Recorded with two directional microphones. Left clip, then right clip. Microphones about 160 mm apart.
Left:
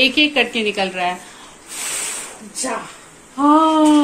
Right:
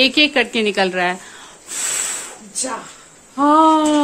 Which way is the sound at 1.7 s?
90° right.